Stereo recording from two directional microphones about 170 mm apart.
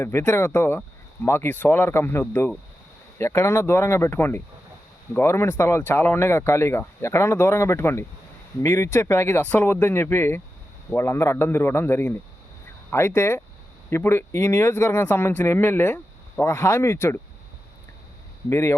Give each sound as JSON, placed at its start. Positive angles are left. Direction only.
{"t": 0.0, "sound": "speech", "side_deg": 15}
{"t": 18.4, "sound": "speech", "side_deg": 15}